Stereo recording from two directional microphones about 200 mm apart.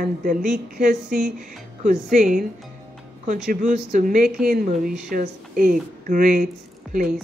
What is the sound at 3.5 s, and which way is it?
A woman's voice, 40° right (ahead or behind).